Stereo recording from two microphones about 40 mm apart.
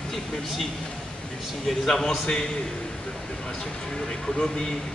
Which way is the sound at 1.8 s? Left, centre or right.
Centre.